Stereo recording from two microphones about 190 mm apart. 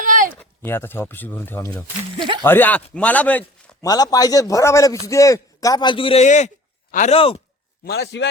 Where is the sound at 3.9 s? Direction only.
20° left (ahead or behind).